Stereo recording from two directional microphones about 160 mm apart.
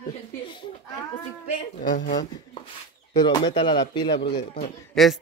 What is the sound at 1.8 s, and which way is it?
Speech, 60° left (ahead or behind).